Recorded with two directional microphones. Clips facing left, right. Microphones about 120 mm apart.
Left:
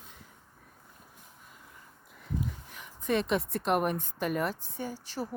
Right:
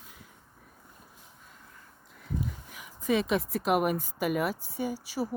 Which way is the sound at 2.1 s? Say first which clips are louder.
Right 1 dB; centre (ahead or behind).